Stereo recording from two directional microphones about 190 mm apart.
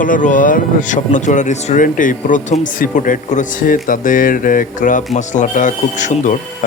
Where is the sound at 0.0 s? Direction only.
45° left (ahead or behind).